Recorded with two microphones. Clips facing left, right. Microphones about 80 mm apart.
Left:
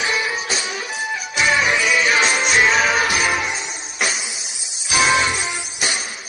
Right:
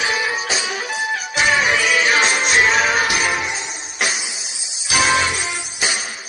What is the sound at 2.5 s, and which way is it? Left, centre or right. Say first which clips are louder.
Music: even; right.